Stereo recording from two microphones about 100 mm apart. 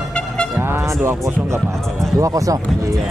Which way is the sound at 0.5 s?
25° right (ahead or behind).